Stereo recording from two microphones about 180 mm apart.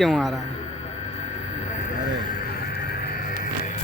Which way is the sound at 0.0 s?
Centre (ahead or behind).